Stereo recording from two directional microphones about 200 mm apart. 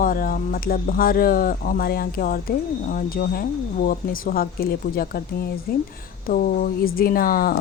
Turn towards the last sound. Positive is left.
turn(degrees=45)  # may be behind; listen again after turning